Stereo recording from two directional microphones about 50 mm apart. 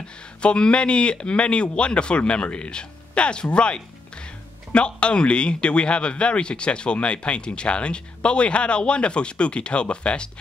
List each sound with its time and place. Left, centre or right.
0.4 s a man's voice: left